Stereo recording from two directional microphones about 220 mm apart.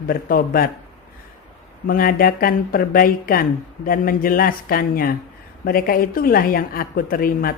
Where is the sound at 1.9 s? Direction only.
40° left (ahead or behind).